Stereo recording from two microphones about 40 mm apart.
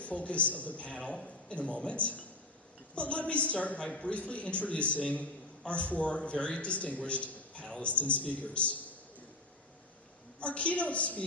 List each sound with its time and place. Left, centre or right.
0.0 s a man's voice: left
10.4 s a man's voice: left